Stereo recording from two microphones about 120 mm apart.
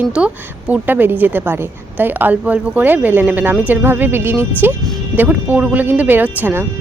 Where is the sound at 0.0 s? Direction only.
10° right (ahead or behind).